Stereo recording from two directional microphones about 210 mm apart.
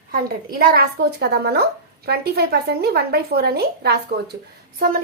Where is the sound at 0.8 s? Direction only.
50° right (ahead or behind).